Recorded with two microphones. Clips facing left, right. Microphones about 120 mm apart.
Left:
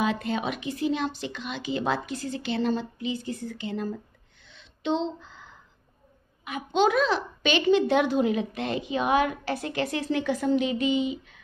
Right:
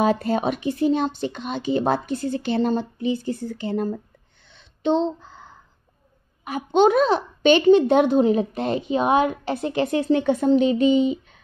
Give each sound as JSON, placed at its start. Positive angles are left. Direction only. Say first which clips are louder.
{"t": 0.0, "sound": "a woman's voice", "louder": "right 7 dB", "side_deg": -40}
{"t": 4.6, "sound": "a sound", "louder": "right 6 dB", "side_deg": -35}
{"t": 6.4, "sound": "a woman's voice", "louder": "right 6 dB", "side_deg": -35}